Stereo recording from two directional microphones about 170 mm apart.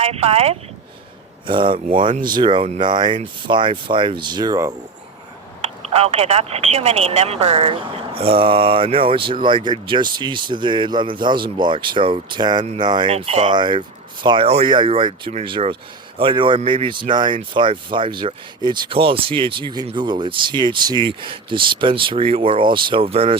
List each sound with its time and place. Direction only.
0.0 s speech: 35° right (ahead or behind); by 4.7 s 20° right (ahead or behind)
5.9 s speech: 35° right (ahead or behind)